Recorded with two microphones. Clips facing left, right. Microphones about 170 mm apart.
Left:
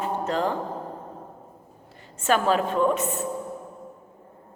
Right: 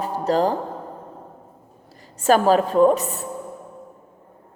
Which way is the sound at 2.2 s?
40° right (ahead or behind).